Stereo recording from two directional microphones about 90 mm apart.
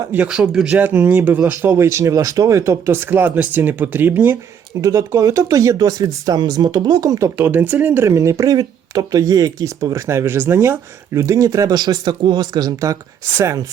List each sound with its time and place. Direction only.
0.3 s speech: 10° right (ahead or behind)
0.8 s speech: 20° right (ahead or behind)
4.8 s speech: 35° right (ahead or behind)
7.3 s speech: 20° right (ahead or behind)
8.0 s speech: 35° right (ahead or behind)